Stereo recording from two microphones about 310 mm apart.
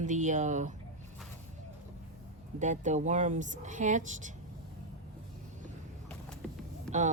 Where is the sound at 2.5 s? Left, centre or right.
Right.